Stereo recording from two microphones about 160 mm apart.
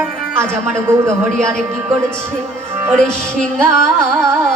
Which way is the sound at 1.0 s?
15° right (ahead or behind).